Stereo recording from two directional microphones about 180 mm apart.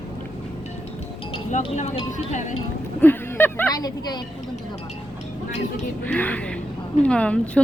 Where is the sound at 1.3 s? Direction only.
35° left (ahead or behind).